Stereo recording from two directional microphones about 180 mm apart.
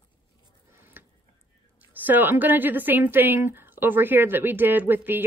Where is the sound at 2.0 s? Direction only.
10° right (ahead or behind).